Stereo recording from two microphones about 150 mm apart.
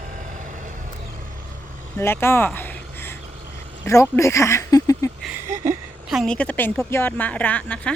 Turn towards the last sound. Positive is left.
turn(degrees=10)  # may be behind; listen again after turning